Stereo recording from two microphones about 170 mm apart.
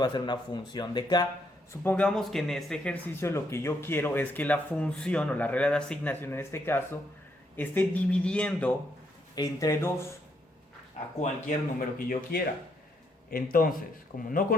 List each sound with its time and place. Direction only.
0.0 s a man's voice: 25° left (ahead or behind)
1.8 s a man's voice: 10° left (ahead or behind)
9.3 s a man's voice: 20° left (ahead or behind)
11.2 s speech: 45° left (ahead or behind)